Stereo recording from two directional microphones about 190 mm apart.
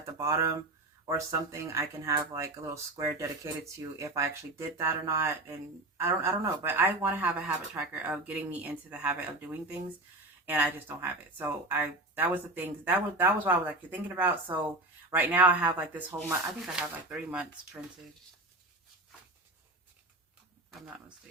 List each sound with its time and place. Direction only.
0.2 s speech: 15° right (ahead or behind)